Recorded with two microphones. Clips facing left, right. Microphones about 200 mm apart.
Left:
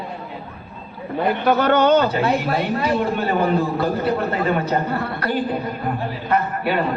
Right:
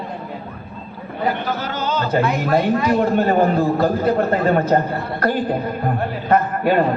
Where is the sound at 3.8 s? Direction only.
45° right (ahead or behind).